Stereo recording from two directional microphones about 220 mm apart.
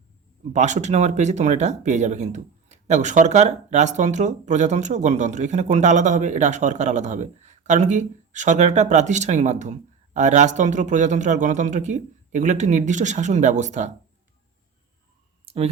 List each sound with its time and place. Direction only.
0.5 s speech: 35° right (ahead or behind)
15.4 s clicking: 25° right (ahead or behind)